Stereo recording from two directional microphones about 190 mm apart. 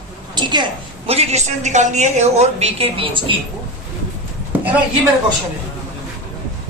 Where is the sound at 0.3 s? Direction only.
25° right (ahead or behind).